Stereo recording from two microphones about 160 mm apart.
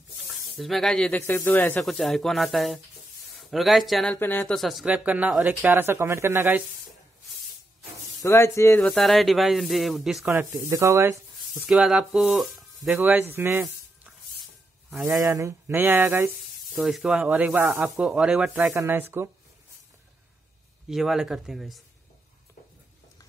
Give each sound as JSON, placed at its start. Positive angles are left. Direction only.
{"t": 0.3, "sound": "speech", "side_deg": 0}
{"t": 4.2, "sound": "speech", "side_deg": 15}
{"t": 4.5, "sound": "speech", "side_deg": 0}
{"t": 8.2, "sound": "speech", "side_deg": 15}
{"t": 8.7, "sound": "speech", "side_deg": 5}
{"t": 10.3, "sound": "speech", "side_deg": -15}
{"t": 11.6, "sound": "speech", "side_deg": -5}
{"t": 13.4, "sound": "a sound", "side_deg": -10}
{"t": 15.0, "sound": "speech", "side_deg": -20}
{"t": 16.7, "sound": "speech", "side_deg": 0}
{"t": 20.9, "sound": "speech", "side_deg": 0}